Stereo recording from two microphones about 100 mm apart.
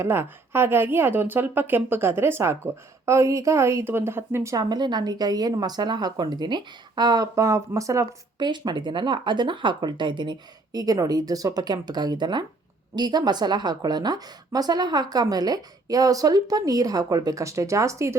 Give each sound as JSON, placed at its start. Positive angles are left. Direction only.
{"t": 0.0, "sound": "a woman's voice", "side_deg": -25}
{"t": 4.5, "sound": "speech", "side_deg": -45}
{"t": 8.4, "sound": "a woman's voice", "side_deg": -45}